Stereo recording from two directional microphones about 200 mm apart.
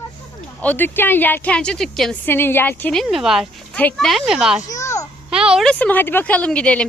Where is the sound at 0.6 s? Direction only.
10° left (ahead or behind).